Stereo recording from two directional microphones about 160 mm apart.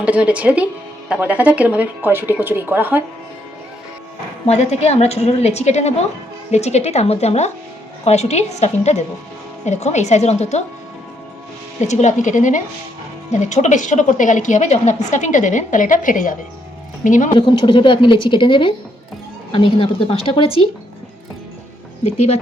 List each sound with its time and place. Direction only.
0.0 s speech: 10° right (ahead or behind)
4.4 s a woman's voice: 45° left (ahead or behind)
11.9 s a woman's voice: 45° left (ahead or behind)
17.3 s a woman's voice: 30° left (ahead or behind)